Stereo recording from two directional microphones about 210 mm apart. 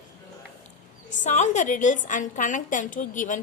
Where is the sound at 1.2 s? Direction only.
35° left (ahead or behind).